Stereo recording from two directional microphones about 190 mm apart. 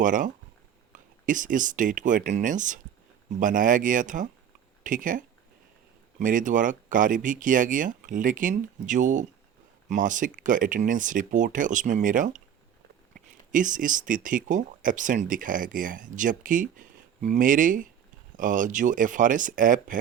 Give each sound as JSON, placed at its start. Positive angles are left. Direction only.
{"t": 0.0, "sound": "speech", "side_deg": -45}